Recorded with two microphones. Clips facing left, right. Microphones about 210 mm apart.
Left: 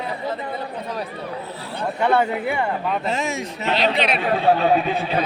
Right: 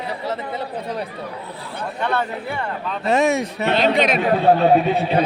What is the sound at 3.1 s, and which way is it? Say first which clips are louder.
A man's voice: right 7 dB; 65° right (ahead or behind).